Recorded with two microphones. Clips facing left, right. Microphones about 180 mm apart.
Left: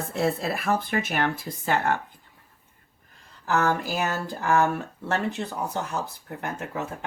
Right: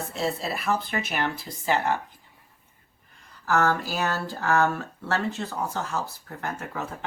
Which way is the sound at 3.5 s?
20° left (ahead or behind).